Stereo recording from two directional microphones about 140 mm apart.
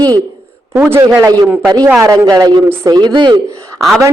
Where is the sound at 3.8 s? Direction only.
Centre (ahead or behind).